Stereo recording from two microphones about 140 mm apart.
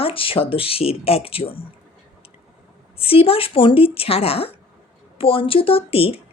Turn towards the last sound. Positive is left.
turn(degrees=45)  # may be behind; listen again after turning